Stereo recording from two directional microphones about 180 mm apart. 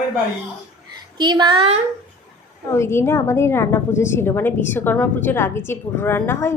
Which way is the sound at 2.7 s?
15° left (ahead or behind).